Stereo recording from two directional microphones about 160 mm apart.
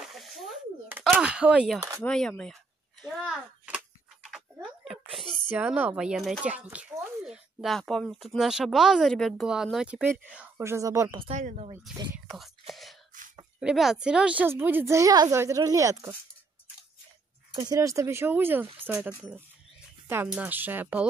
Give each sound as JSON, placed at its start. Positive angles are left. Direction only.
{"t": 0.1, "sound": "a sound", "side_deg": 0}
{"t": 1.0, "sound": "speech", "side_deg": -5}
{"t": 2.0, "sound": "speech", "side_deg": 5}
{"t": 3.6, "sound": "a sound", "side_deg": -5}
{"t": 5.5, "sound": "a woman's voice", "side_deg": -10}
{"t": 11.2, "sound": "speech", "side_deg": -50}
{"t": 12.3, "sound": "whispering", "side_deg": 0}
{"t": 13.6, "sound": "a woman's voice", "side_deg": -5}
{"t": 17.6, "sound": "a woman's voice", "side_deg": -20}